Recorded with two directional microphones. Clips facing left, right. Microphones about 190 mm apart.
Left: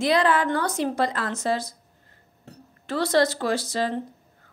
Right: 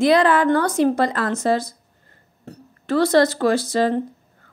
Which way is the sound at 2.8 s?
50° right (ahead or behind).